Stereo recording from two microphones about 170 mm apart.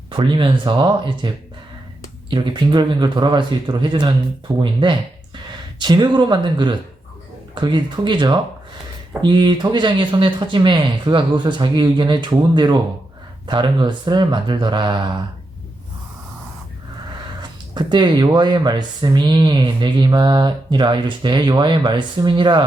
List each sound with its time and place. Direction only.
0.2 s speech: 25° right (ahead or behind)
2.3 s speech: 30° right (ahead or behind)
17.7 s speech: 25° right (ahead or behind)